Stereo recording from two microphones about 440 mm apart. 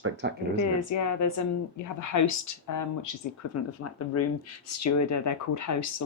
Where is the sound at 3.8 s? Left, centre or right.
Left.